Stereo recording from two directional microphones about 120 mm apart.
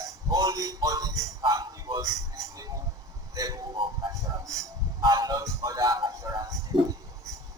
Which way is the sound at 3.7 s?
45° right (ahead or behind).